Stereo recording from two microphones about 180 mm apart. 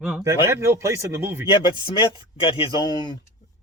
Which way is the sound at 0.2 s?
15° right (ahead or behind).